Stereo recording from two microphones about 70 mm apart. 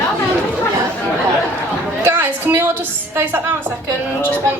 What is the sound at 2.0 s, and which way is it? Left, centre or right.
A woman's voice, right.